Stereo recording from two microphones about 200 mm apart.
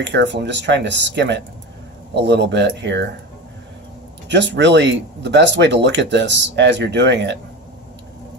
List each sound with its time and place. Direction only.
0.0 s speech: 60° right (ahead or behind)
4.3 s speech: 60° right (ahead or behind)